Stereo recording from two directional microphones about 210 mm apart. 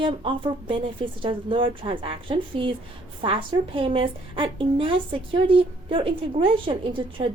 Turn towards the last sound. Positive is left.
turn(degrees=-25)  # may be behind; listen again after turning